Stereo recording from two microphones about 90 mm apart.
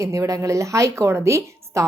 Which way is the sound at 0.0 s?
35° right (ahead or behind).